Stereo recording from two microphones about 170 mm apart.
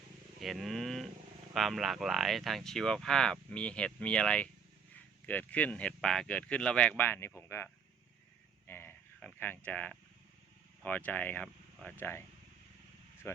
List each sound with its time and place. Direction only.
0.3 s speech: centre (ahead or behind)
8.6 s livestock: 10° left (ahead or behind)
10.8 s speech: 10° left (ahead or behind)
13.2 s speech: 15° left (ahead or behind)